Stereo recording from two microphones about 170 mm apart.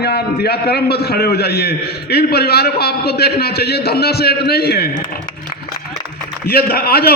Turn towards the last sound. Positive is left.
turn(degrees=65)  # may be behind; listen again after turning